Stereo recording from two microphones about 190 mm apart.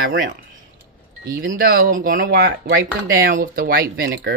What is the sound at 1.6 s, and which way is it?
Speech, 50° right (ahead or behind).